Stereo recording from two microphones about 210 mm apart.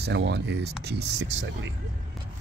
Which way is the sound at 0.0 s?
55° right (ahead or behind).